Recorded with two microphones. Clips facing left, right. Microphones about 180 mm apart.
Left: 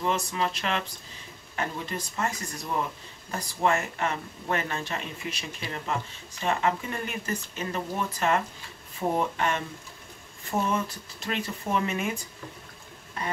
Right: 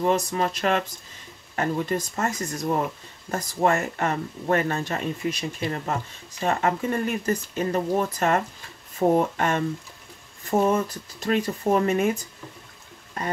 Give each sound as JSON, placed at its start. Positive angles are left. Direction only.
{"t": 0.0, "sound": "speech", "side_deg": -45}